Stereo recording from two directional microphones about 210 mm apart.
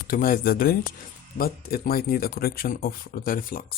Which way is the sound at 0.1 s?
45° left (ahead or behind).